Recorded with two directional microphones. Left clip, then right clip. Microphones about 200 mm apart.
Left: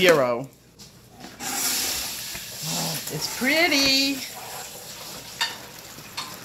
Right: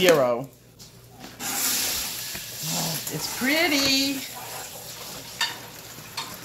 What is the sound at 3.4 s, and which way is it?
Speech, 35° left (ahead or behind).